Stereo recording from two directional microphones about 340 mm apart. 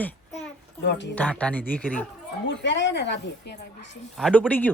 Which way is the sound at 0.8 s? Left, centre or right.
Left.